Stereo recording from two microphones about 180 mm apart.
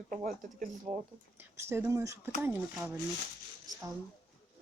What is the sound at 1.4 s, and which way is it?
Speech, 15° right (ahead or behind).